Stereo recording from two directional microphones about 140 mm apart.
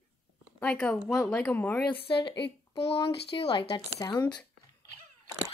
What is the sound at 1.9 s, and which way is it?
Speech, 35° left (ahead or behind).